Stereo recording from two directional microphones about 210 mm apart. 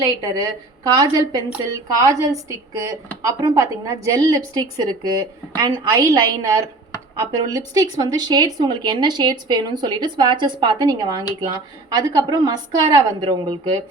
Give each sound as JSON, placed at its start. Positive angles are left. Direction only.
{"t": 0.0, "sound": "a woman's voice", "side_deg": -15}